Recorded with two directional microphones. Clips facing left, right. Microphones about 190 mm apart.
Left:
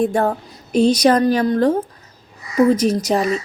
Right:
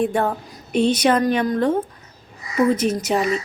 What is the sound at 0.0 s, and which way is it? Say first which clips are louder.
A woman's voice: left 3 dB; 35° left (ahead or behind).